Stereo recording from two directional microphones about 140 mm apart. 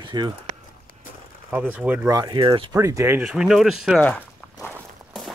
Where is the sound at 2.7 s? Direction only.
20° right (ahead or behind).